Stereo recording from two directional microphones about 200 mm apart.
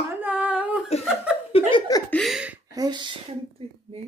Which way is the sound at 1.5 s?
25° left (ahead or behind).